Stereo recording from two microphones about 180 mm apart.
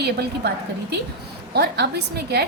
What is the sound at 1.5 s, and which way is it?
Speech, 65° right (ahead or behind).